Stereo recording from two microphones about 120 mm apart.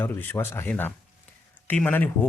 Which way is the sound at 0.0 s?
20° left (ahead or behind).